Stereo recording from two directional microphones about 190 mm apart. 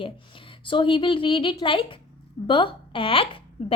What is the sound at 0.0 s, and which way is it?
A child's voice, 25° left (ahead or behind).